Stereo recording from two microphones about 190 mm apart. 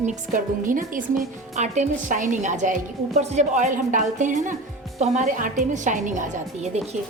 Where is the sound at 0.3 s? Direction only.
45° right (ahead or behind).